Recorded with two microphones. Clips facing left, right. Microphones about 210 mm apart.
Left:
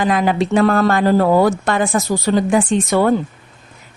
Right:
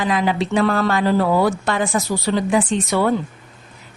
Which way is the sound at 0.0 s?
50° left (ahead or behind).